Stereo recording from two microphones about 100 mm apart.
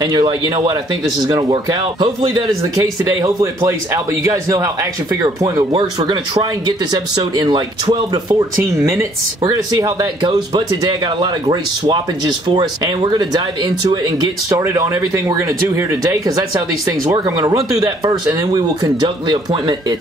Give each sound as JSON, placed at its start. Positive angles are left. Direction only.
{"t": 0.0, "sound": "speech", "side_deg": -45}
{"t": 5.7, "sound": "speech", "side_deg": -50}
{"t": 9.4, "sound": "speech", "side_deg": -35}
{"t": 14.6, "sound": "speech", "side_deg": -25}